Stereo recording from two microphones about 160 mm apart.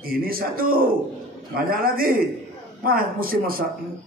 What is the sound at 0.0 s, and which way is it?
A man's voice, 65° right (ahead or behind).